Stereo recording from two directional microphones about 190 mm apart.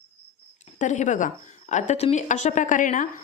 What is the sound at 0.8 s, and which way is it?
A woman's voice, 40° left (ahead or behind).